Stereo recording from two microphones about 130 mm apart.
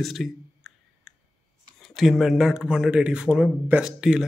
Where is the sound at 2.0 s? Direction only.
Centre (ahead or behind).